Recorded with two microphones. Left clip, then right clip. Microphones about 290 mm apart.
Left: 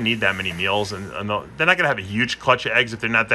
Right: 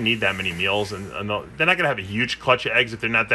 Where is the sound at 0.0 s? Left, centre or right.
Centre.